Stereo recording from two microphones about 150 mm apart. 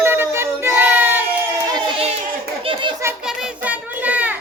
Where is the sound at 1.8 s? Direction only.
30° right (ahead or behind).